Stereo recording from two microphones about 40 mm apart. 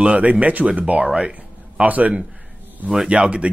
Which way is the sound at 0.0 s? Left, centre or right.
Right.